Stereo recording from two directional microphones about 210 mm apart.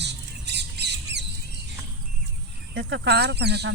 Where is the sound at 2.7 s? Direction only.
55° right (ahead or behind).